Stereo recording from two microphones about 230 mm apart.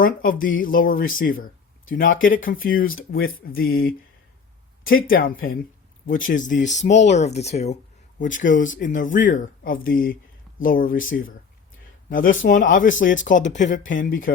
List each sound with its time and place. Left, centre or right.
0.0 s speech: left
2.0 s speech: left
2.5 s speech: left
8.5 s speech: left
8.8 s speech: left